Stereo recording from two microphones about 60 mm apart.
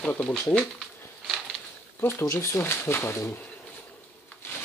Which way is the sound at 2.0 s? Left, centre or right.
Left.